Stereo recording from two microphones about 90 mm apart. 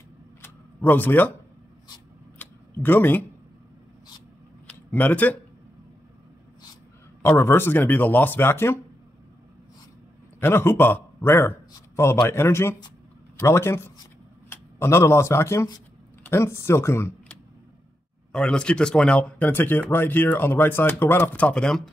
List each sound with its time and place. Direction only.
0.4 s a sound: 20° left (ahead or behind)
2.3 s a sound: 20° left (ahead or behind)
4.9 s speech: 20° left (ahead or behind)
7.2 s speech: 25° left (ahead or behind)
10.4 s a man's voice: 25° left (ahead or behind)
18.3 s speech: 10° left (ahead or behind)